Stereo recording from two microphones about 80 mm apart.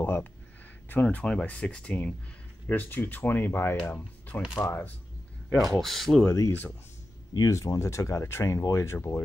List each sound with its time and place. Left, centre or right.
0.0 s a sound: left
1.0 s speech: centre
2.7 s speech: left
4.6 s speech: left
5.5 s speech: centre
6.2 s speech: left